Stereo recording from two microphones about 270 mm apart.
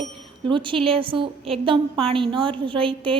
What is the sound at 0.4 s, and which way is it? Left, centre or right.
A woman's voice, centre.